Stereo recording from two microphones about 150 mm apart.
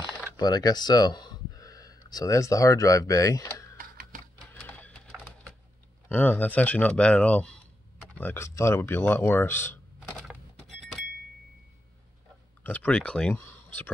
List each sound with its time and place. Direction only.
0.4 s a sound: 25° left (ahead or behind)
2.0 s speech: 25° left (ahead or behind)
3.7 s typewriter: 75° right (ahead or behind)
4.5 s horse: 10° left (ahead or behind)
6.0 s speech: 10° left (ahead or behind)
10.1 s a sound: centre (ahead or behind)
12.6 s speech: 10° left (ahead or behind)